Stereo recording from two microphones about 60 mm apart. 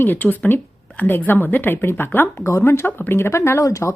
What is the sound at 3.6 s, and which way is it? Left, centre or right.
Speech, left.